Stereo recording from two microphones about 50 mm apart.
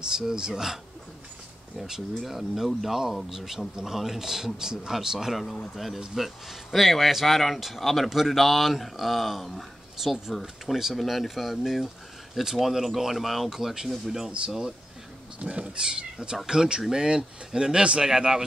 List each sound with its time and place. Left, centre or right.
0.1 s speech: centre
1.8 s speech: centre
15.3 s speech: right